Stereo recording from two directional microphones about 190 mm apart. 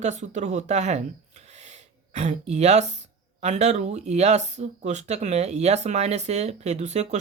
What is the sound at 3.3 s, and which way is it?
Speech, 35° right (ahead or behind).